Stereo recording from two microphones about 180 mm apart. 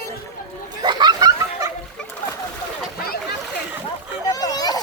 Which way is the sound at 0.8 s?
25° right (ahead or behind).